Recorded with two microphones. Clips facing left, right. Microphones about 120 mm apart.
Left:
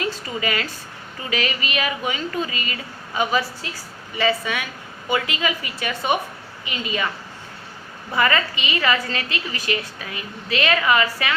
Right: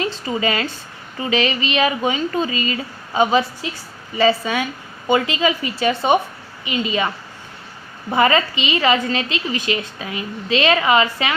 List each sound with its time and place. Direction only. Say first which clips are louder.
0.0 s a woman's voice: right 4 dB; 25° right (ahead or behind)
8.1 s a woman's voice: right 5 dB; 25° right (ahead or behind)